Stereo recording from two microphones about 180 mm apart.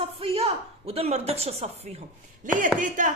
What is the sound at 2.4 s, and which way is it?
Speech, 45° right (ahead or behind).